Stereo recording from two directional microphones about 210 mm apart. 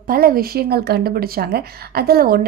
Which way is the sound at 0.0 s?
45° right (ahead or behind).